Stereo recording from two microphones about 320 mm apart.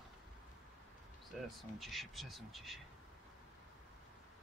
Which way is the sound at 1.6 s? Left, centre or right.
Centre.